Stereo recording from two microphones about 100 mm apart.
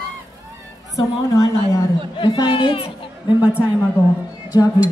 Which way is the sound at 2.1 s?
50° left (ahead or behind).